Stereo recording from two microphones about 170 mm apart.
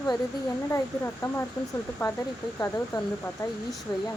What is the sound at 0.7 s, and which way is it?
Speech, 15° left (ahead or behind).